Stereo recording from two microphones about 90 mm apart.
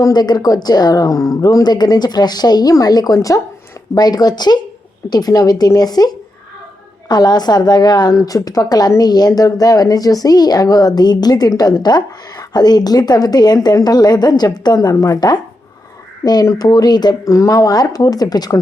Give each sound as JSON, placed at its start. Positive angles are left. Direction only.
{"t": 0.0, "sound": "a woman's voice", "side_deg": 50}
{"t": 14.9, "sound": "a woman's voice", "side_deg": 35}
{"t": 17.2, "sound": "a woman's voice", "side_deg": 35}